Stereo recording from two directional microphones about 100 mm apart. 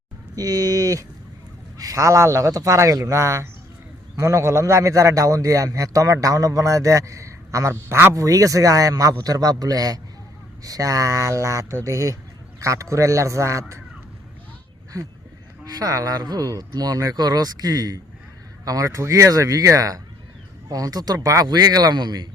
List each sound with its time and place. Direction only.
0.3 s a man's voice: 40° right (ahead or behind)
8.1 s a man's voice: 35° right (ahead or behind)
15.7 s a man's voice: 35° right (ahead or behind)